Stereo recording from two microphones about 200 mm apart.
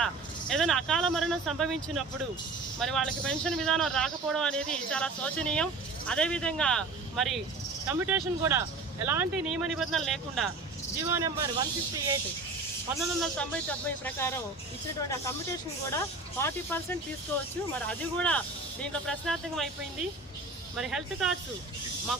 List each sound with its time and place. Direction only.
0.0 s speech: centre (ahead or behind)
11.1 s speech: 15° right (ahead or behind)
13.0 s speech: 5° left (ahead or behind)
15.9 s speech: 15° left (ahead or behind)
20.7 s speech: centre (ahead or behind)